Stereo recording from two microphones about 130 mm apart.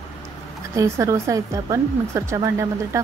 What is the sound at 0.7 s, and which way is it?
Speech, 25° right (ahead or behind).